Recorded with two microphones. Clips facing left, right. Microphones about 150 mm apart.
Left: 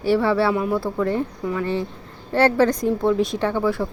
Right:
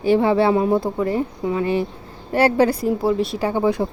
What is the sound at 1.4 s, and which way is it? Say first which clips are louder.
Speech: right 3 dB; 20° right (ahead or behind).